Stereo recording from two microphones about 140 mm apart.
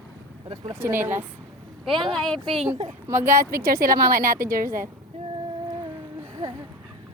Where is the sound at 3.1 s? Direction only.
20° right (ahead or behind).